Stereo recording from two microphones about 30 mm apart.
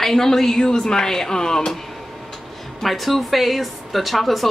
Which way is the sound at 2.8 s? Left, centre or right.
Centre.